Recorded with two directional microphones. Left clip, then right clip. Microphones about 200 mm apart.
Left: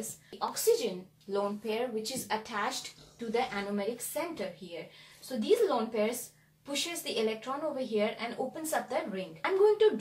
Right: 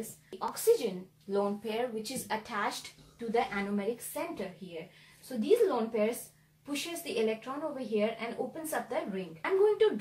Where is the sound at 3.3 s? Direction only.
5° right (ahead or behind).